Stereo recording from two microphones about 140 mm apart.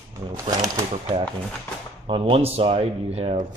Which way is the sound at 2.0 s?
40° right (ahead or behind).